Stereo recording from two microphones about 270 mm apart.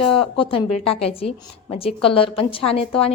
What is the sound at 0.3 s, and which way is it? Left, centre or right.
Speech, left.